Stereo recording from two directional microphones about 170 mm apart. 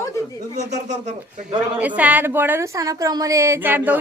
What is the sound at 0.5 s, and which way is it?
Speech, 45° right (ahead or behind).